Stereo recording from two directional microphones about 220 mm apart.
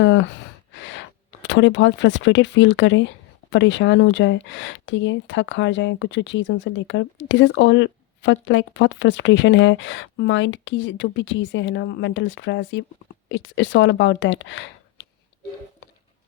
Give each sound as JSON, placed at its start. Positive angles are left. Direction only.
{"t": 0.0, "sound": "speech", "side_deg": 55}